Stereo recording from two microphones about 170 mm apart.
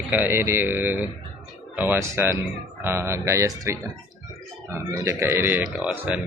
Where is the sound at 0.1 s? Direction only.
15° right (ahead or behind).